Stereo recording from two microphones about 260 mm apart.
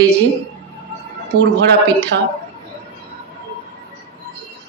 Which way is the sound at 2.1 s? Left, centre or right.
Right.